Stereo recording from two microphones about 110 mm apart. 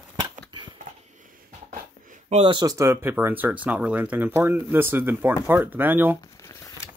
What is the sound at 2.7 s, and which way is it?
Speech, 25° right (ahead or behind).